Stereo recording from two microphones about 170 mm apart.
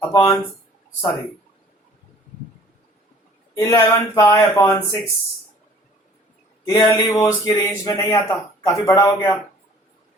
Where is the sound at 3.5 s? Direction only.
20° left (ahead or behind).